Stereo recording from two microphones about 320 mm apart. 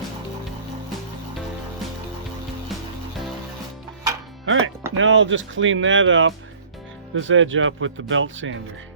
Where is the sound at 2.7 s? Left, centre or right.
Centre.